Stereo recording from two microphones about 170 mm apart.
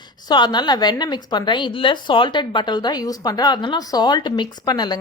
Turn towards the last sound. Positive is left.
turn(degrees=25)  # may be behind; listen again after turning